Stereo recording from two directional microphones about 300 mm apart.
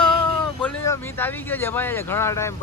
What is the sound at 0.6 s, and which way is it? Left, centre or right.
Speech, centre.